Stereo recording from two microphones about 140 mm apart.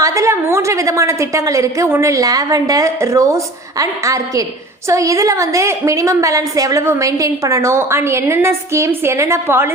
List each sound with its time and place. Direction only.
0.0 s a woman's voice: 20° right (ahead or behind)